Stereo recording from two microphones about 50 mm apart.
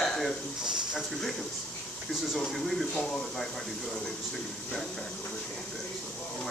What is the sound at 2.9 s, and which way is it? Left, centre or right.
Speech, centre.